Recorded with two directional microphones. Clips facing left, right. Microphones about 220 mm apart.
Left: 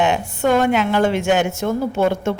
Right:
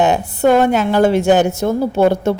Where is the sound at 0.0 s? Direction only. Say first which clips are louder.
Right 4 dB; 35° right (ahead or behind).